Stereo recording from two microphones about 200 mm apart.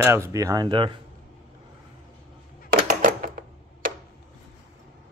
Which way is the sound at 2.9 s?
45° right (ahead or behind).